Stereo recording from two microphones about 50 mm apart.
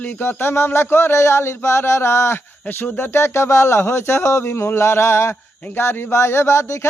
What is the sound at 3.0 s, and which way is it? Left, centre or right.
A man's voice, left.